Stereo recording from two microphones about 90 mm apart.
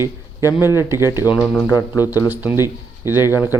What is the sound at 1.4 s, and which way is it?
Speech, centre (ahead or behind).